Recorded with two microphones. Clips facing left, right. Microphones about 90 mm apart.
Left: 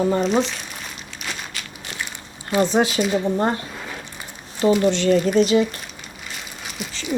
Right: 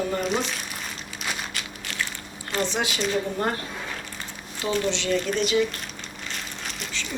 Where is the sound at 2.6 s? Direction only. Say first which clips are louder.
Left 9 dB; 40° left (ahead or behind).